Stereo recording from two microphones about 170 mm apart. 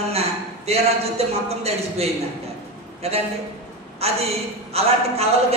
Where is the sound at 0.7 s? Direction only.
40° right (ahead or behind).